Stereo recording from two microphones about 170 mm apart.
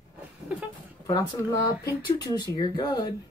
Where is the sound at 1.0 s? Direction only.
20° left (ahead or behind).